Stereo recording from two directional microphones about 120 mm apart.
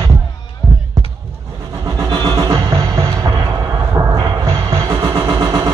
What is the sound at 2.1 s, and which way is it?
Music, 35° right (ahead or behind).